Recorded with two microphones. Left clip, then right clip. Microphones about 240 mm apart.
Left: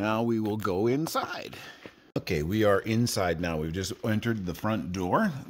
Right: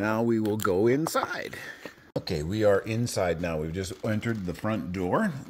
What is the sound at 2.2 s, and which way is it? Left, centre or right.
Speech, left.